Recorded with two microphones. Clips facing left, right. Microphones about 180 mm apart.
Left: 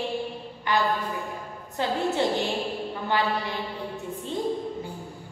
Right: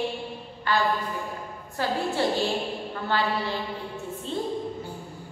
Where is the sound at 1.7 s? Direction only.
20° left (ahead or behind).